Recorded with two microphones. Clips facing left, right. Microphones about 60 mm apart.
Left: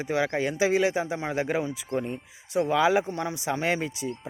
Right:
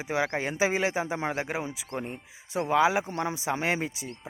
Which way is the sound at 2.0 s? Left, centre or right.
Right.